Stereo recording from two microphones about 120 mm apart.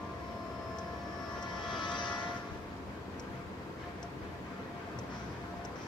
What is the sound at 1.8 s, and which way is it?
Train, 40° left (ahead or behind).